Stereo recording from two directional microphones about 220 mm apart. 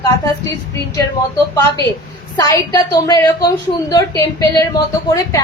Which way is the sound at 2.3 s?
15° left (ahead or behind).